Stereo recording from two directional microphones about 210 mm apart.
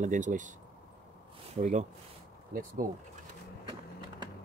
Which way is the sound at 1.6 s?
35° right (ahead or behind).